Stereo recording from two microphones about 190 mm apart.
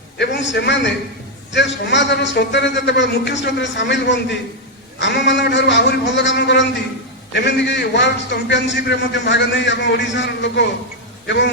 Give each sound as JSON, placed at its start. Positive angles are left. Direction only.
{"t": 0.2, "sound": "a man's voice", "side_deg": 65}